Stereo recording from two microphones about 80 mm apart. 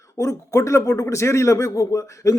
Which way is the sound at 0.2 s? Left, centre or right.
Left.